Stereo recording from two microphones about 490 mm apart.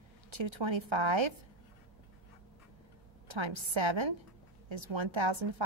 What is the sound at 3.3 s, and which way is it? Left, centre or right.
A woman's voice, right.